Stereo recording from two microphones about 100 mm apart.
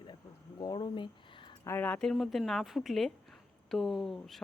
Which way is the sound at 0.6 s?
45° left (ahead or behind).